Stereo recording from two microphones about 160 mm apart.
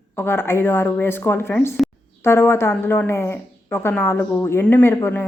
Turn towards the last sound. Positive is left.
turn(degrees=15)  # may be behind; listen again after turning